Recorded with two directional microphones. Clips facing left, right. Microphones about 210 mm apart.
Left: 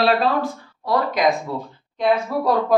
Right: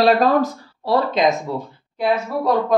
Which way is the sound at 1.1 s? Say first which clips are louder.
Even; 25° right (ahead or behind).